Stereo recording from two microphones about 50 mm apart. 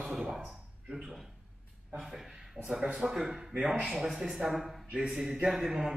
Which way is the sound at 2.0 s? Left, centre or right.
Centre.